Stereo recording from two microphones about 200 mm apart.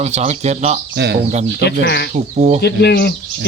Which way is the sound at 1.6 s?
55° left (ahead or behind).